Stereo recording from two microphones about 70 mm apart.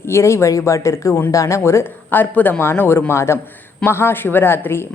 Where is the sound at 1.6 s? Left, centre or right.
Left.